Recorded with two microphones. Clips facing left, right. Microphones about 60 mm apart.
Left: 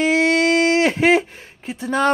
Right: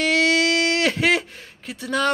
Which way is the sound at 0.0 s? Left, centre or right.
Left.